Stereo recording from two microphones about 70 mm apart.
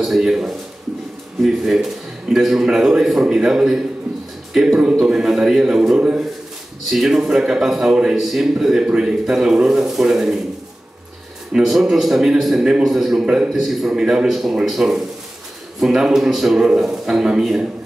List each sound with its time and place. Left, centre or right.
0.0 s a man's voice: centre
11.5 s a man's voice: centre